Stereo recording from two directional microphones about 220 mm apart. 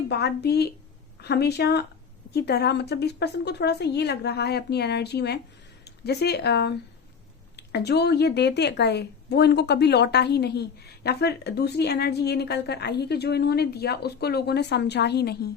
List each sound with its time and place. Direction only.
0.1 s a woman's voice: 50° left (ahead or behind)